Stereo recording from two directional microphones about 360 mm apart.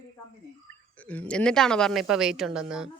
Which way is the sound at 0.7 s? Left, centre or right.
Centre.